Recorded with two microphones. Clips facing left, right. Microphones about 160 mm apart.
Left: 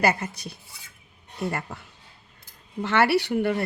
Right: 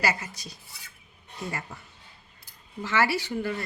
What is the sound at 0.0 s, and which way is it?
A woman's voice, 55° left (ahead or behind).